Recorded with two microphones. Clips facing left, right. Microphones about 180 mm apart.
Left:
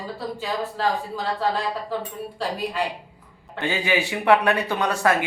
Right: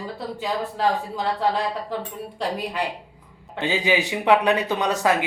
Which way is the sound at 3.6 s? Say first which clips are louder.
Right 1 dB; 15° right (ahead or behind).